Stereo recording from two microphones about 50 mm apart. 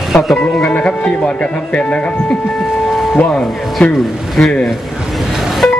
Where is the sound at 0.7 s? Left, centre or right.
Left.